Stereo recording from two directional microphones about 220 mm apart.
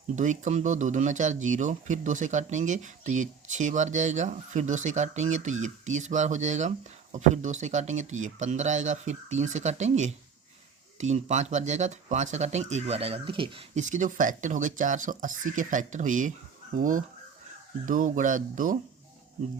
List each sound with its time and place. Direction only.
0.2 s speech: 35° right (ahead or behind)